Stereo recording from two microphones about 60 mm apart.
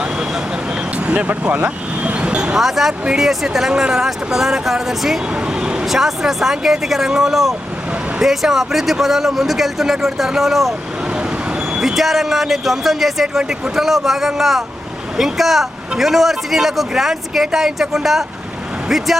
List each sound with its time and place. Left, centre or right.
0.9 s vehicle: right
2.6 s a man's voice: centre
5.8 s a man's voice: centre